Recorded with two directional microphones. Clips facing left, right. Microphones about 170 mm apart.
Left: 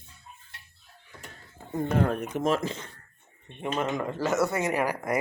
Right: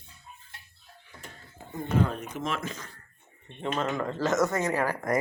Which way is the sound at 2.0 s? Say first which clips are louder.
Even; 60° left (ahead or behind).